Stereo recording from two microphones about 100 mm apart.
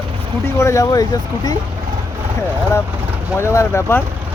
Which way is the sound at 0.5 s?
30° left (ahead or behind).